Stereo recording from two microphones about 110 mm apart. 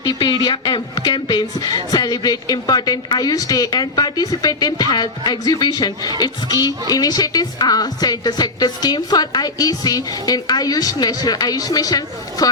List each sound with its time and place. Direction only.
0.0 s a man's voice: 45° left (ahead or behind)